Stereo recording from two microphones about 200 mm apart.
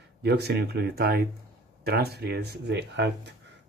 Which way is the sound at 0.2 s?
55° right (ahead or behind).